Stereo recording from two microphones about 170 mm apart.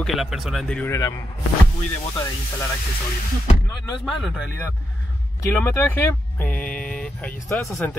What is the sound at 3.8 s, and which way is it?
Speech, centre (ahead or behind).